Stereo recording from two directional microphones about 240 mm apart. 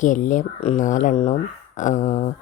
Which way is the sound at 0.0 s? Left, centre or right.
Left.